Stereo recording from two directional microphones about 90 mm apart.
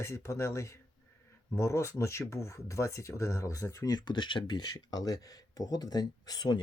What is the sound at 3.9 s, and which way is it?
Speech, 55° left (ahead or behind).